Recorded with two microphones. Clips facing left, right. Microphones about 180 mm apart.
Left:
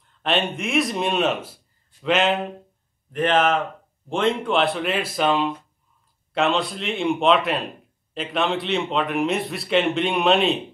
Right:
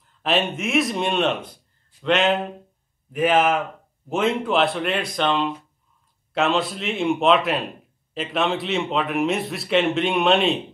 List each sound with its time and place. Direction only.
0.0 s a man's voice: centre (ahead or behind)